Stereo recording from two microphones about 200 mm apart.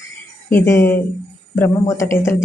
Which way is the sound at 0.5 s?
10° left (ahead or behind).